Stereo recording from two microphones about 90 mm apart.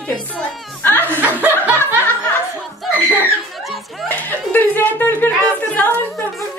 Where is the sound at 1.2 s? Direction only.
20° right (ahead or behind).